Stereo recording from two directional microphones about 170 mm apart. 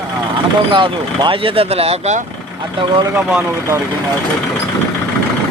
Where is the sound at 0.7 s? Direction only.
30° right (ahead or behind).